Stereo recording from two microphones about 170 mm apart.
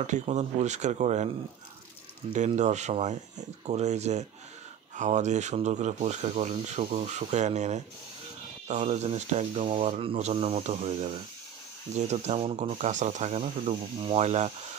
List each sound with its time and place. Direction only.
0.0 s speech: 45° right (ahead or behind)
2.3 s speech: 45° right (ahead or behind)